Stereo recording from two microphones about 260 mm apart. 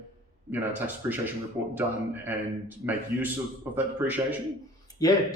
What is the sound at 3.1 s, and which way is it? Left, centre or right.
A man's voice, centre.